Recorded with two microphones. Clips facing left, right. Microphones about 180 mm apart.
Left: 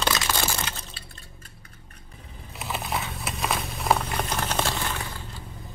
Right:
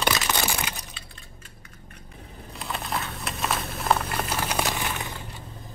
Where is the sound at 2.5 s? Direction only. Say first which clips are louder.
Left 1 dB; centre (ahead or behind); by 5.2 s 20° right (ahead or behind).